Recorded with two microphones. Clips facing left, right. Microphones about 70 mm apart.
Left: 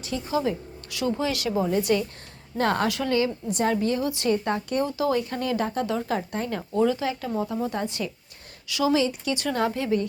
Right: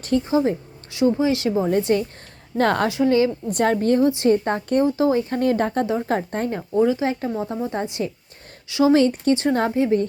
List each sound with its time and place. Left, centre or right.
0.3 s speech: right
2.6 s a woman's voice: right
2.9 s speech: right
3.5 s a woman's voice: right
4.1 s speech: right
5.8 s speech: right
6.1 s speech: right
6.7 s speech: centre
7.0 s speech: right
8.9 s a woman's voice: right
9.3 s speech: right